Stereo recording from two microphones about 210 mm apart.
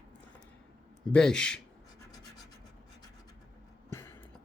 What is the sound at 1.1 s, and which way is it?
Speech, 5° left (ahead or behind).